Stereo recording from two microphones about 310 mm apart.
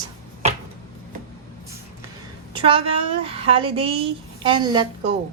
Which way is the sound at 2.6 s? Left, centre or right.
Centre.